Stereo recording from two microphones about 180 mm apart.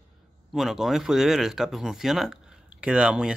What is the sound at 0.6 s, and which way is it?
Speech, centre (ahead or behind).